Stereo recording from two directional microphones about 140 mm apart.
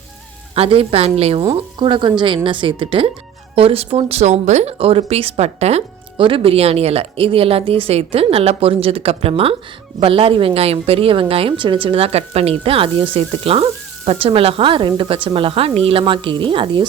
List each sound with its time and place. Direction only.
0.5 s a woman's voice: 40° right (ahead or behind)